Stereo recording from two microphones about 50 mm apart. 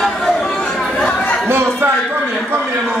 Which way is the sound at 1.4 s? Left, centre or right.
Right.